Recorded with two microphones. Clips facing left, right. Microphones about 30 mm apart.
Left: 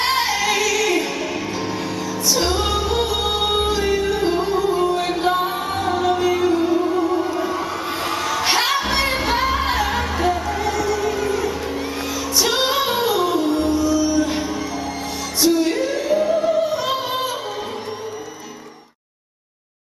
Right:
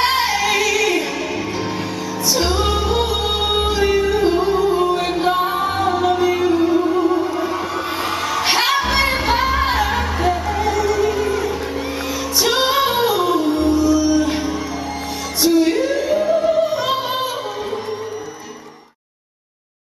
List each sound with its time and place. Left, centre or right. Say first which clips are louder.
0.0 s music: right 2 dB; centre
2.2 s music: right 2 dB; centre